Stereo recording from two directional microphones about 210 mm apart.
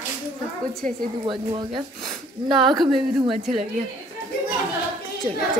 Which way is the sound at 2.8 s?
Centre (ahead or behind).